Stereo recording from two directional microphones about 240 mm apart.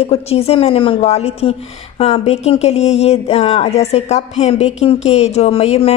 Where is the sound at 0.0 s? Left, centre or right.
Left.